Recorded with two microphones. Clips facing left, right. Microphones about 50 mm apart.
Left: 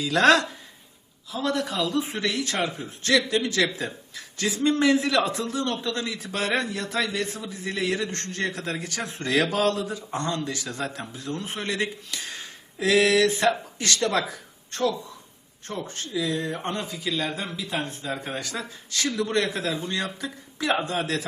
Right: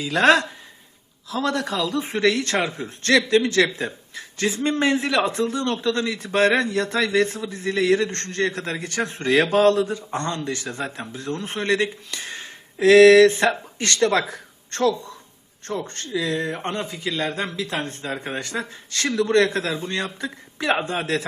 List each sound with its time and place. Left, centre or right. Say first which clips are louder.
0.0 s speech: right 2 dB; centre
1.3 s a man's voice: right 3 dB; right
1.9 s speech: right 2 dB; right
2.2 s a man's voice: right 6 dB; right
9.2 s speech: right 6 dB; right
11.1 s speech: right 4 dB; right
15.9 s speech: right 1 dB; right
17.3 s speech: right 4 dB; right
18.1 s speech: right 4 dB; right
18.9 s a man's voice: right 6 dB; right
20.2 s speech: right 5 dB; right